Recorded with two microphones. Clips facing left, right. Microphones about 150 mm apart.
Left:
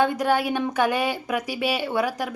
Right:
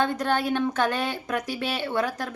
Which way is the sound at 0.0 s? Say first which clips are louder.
Left 3 dB; 10° left (ahead or behind).